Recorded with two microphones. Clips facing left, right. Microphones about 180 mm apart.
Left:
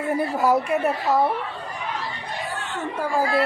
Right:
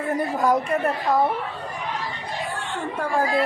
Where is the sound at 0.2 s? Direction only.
5° left (ahead or behind).